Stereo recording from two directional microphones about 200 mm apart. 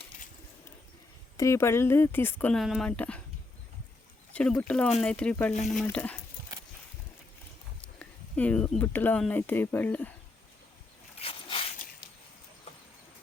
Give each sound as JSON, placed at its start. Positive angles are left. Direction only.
{"t": 1.4, "sound": "speech", "side_deg": 15}
{"t": 4.3, "sound": "speech", "side_deg": 5}
{"t": 7.9, "sound": "speech", "side_deg": 5}
{"t": 11.2, "sound": "a sound", "side_deg": 30}